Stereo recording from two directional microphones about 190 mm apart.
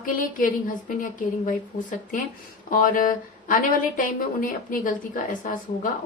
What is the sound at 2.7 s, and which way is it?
A woman's voice, 45° left (ahead or behind).